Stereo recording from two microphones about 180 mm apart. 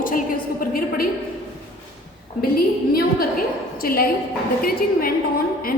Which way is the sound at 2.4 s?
60° left (ahead or behind).